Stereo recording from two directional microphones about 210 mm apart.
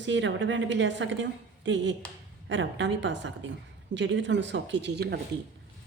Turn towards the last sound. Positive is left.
turn(degrees=-50)  # may be behind; listen again after turning